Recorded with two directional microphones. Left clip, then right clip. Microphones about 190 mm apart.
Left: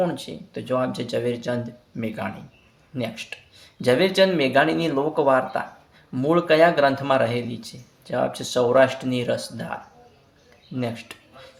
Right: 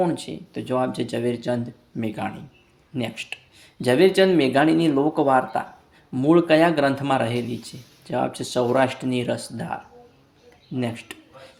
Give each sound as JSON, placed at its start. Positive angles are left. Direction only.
{"t": 0.0, "sound": "speech", "side_deg": -35}
{"t": 10.8, "sound": "speech", "side_deg": -30}